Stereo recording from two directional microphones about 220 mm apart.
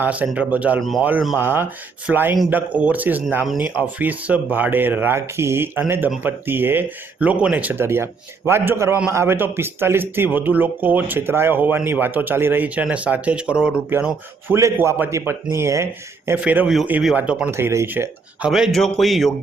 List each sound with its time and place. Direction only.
0.0 s speech: 5° right (ahead or behind)